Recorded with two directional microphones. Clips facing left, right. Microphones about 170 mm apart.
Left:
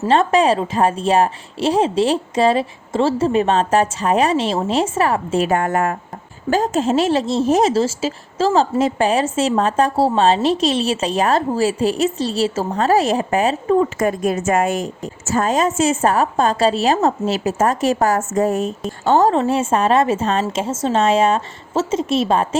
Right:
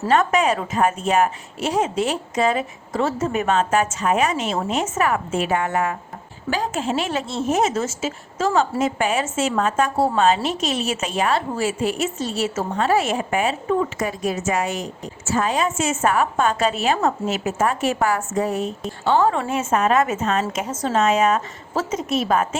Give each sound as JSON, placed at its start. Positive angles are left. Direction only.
{"t": 0.1, "sound": "a woman's voice", "side_deg": 30}
{"t": 14.0, "sound": "a woman's voice", "side_deg": 50}
{"t": 19.4, "sound": "a woman's voice", "side_deg": 30}